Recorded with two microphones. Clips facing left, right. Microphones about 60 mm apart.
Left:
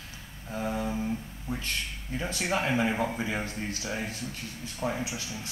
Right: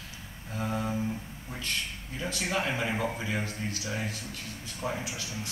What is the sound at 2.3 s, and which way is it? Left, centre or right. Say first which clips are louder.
A man's voice: left 2 dB; left.